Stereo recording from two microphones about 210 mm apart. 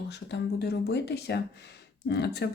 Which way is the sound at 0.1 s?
55° left (ahead or behind).